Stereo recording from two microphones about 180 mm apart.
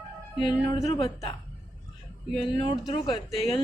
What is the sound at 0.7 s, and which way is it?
Speech, 30° left (ahead or behind).